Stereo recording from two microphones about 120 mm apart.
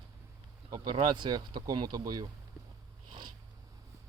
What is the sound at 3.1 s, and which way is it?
Cat, 40° right (ahead or behind).